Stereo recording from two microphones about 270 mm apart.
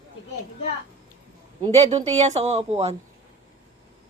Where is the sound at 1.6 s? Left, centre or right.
Right.